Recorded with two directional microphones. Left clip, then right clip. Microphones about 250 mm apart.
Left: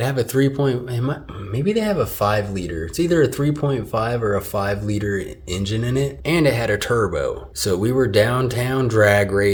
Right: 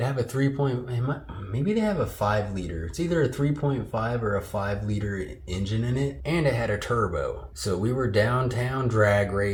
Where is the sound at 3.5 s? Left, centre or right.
Left.